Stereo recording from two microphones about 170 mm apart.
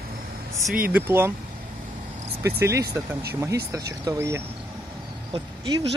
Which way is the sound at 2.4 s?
15° right (ahead or behind).